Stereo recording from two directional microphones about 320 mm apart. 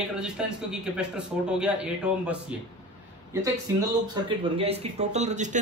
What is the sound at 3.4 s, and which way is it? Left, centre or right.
Speech, centre.